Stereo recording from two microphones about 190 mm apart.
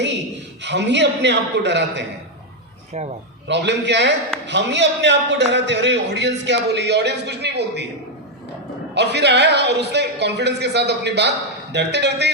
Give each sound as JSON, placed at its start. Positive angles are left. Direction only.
{"t": 0.6, "sound": "a man's voice", "side_deg": -65}
{"t": 3.4, "sound": "a man's voice", "side_deg": -65}
{"t": 9.0, "sound": "a man's voice", "side_deg": -65}